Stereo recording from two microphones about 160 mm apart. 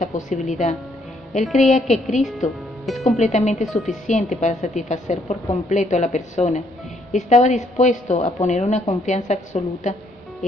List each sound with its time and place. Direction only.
0.1 s a woman's voice: 50° left (ahead or behind)
2.9 s a woman's voice: centre (ahead or behind)
3.2 s a woman's voice: 45° left (ahead or behind)
3.6 s a woman's voice: centre (ahead or behind)
4.2 s a woman's voice: 45° left (ahead or behind)